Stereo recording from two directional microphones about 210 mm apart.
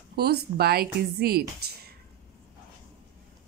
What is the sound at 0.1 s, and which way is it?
A woman's voice, 50° right (ahead or behind).